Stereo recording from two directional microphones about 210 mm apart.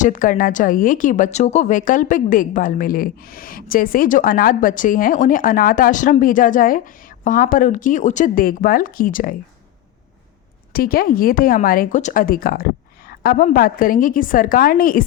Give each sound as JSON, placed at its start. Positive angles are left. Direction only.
{"t": 0.0, "sound": "a woman's voice", "side_deg": 40}
{"t": 10.7, "sound": "speech", "side_deg": 45}